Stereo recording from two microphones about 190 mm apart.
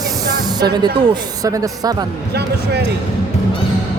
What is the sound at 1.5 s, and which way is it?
Speech, 20° right (ahead or behind).